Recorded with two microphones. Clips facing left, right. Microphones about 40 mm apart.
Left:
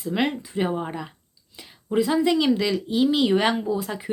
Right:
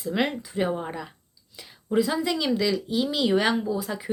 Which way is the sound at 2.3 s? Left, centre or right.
Centre.